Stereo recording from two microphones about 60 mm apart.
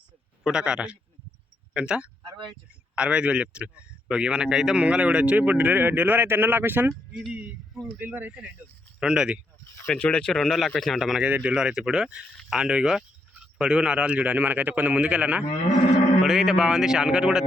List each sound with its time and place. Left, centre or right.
0.4 s a man's voice: centre; by 6.8 s right
7.1 s speech: centre
7.9 s speech: right
9.0 s speech: centre
9.8 s speech: centre
10.3 s a man's voice: centre
11.2 s a man's voice: right
16.2 s speech: centre